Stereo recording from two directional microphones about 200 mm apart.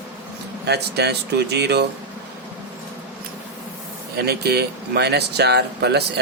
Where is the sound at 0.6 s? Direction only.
55° right (ahead or behind).